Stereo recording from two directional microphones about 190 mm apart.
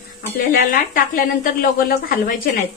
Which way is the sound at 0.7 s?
45° left (ahead or behind).